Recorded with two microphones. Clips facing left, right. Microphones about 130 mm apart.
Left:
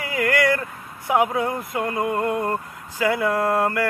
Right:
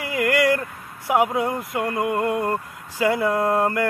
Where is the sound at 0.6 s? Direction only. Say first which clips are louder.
Even; 10° right (ahead or behind).